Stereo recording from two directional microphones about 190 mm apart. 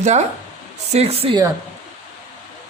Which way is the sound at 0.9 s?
30° right (ahead or behind).